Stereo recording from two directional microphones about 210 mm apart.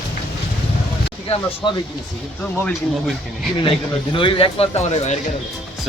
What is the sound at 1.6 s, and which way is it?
Speech, 25° left (ahead or behind).